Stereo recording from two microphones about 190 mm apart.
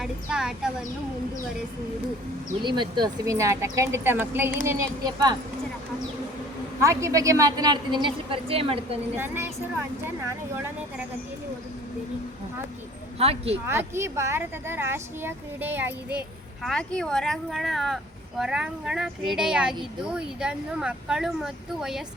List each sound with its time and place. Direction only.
0.0 s speech: 5° right (ahead or behind)
2.6 s a woman's voice: 25° right (ahead or behind)
6.8 s a woman's voice: 15° right (ahead or behind)
9.1 s a woman's voice: 10° right (ahead or behind)
13.1 s speech: 30° right (ahead or behind)
13.7 s a woman's voice: 15° right (ahead or behind)
16.6 s speech: 5° left (ahead or behind)